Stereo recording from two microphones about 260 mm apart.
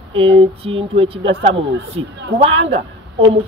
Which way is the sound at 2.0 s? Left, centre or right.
Right.